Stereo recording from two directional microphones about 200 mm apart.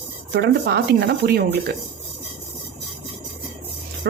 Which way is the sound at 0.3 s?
55° right (ahead or behind).